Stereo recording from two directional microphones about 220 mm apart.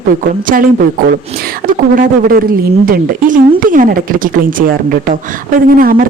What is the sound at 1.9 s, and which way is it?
Speech, 40° right (ahead or behind).